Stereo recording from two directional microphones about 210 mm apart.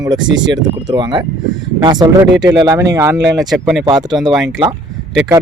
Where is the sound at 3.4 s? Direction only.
Centre (ahead or behind).